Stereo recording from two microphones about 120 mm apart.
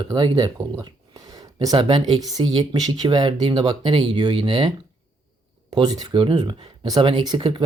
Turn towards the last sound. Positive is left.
turn(degrees=-40)  # may be behind; listen again after turning